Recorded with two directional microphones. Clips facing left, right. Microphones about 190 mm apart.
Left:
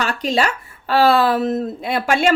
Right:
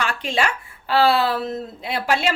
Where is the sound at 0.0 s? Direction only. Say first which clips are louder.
Left 4 dB; 40° left (ahead or behind).